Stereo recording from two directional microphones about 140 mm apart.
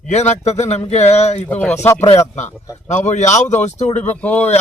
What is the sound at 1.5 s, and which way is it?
Speech, 10° left (ahead or behind).